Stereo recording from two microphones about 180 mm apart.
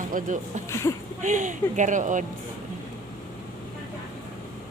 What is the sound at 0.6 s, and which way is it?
Speech, 15° left (ahead or behind).